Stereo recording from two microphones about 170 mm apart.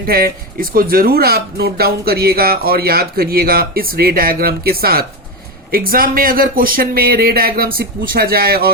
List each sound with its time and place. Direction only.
0.0 s speech: 60° right (ahead or behind)